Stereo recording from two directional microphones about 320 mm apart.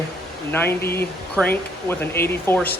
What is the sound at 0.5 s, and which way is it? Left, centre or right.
Speech, centre.